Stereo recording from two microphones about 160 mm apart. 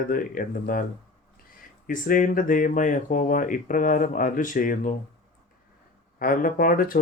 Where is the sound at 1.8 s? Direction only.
60° left (ahead or behind).